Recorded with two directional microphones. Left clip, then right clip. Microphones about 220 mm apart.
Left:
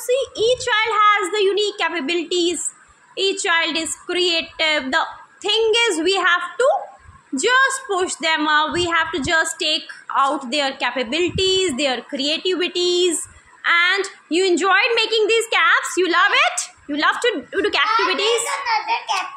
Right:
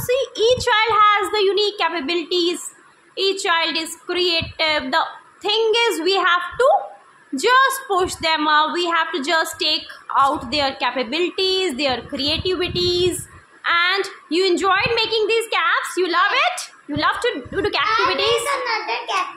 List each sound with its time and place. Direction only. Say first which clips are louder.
0.0 s a woman's voice: right 1 dB; 10° right (ahead or behind)
17.8 s a child's voice: right 2 dB; 15° right (ahead or behind)
18.1 s a woman's voice: even; 5° left (ahead or behind)
18.4 s a child's voice: even; 15° right (ahead or behind)